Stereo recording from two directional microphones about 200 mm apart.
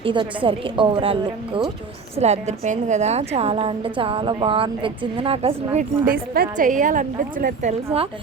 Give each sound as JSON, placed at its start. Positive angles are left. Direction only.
{"t": 0.0, "sound": "a woman's voice", "side_deg": -25}
{"t": 6.1, "sound": "a woman's voice", "side_deg": -45}